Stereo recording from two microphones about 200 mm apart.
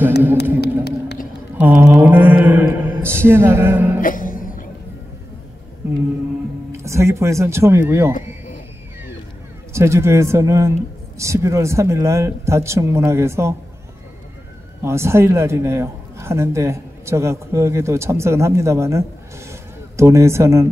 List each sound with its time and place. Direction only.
0.8 s run: 55° left (ahead or behind)
1.6 s a man's voice: 10° right (ahead or behind)
4.0 s music: 45° left (ahead or behind)
6.7 s speech: 15° right (ahead or behind)
9.7 s a man's voice: 15° right (ahead or behind)
14.8 s a man's voice: 15° right (ahead or behind)